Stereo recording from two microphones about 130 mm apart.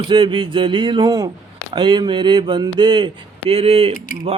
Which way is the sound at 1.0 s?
25° right (ahead or behind).